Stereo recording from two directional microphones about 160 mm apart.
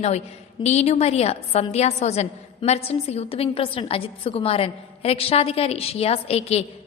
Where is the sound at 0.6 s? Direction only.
45° left (ahead or behind).